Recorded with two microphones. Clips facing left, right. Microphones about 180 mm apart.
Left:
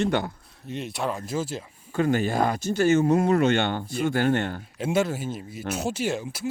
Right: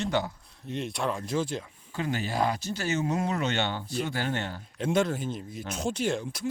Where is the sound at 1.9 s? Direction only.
50° left (ahead or behind).